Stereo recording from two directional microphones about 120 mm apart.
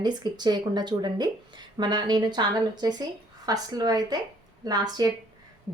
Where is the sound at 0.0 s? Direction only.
35° right (ahead or behind).